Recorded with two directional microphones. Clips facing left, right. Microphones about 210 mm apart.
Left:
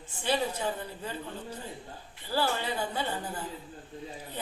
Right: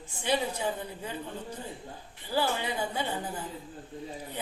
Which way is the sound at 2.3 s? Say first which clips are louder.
Even; 15° right (ahead or behind).